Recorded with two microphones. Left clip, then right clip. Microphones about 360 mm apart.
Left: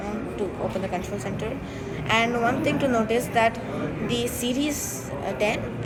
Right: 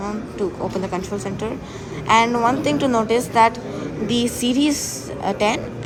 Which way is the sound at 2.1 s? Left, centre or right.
Centre.